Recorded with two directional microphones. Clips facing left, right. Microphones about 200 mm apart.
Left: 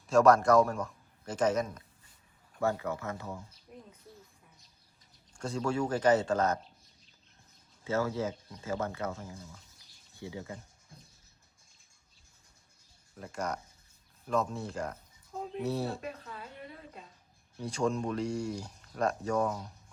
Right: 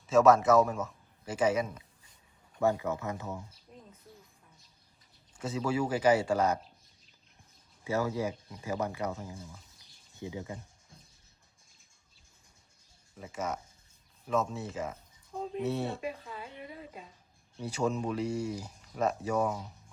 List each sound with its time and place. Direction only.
0.1 s a man's voice: centre (ahead or behind)
2.6 s speech: 20° right (ahead or behind)
3.7 s bird: 10° left (ahead or behind)
5.4 s speech: 5° right (ahead or behind)
7.9 s speech: 15° right (ahead or behind)
13.1 s speech: 5° right (ahead or behind)